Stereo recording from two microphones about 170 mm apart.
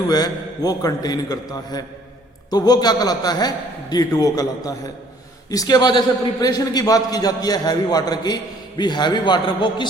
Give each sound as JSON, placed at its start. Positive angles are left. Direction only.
{"t": 0.1, "sound": "a man's voice", "side_deg": 20}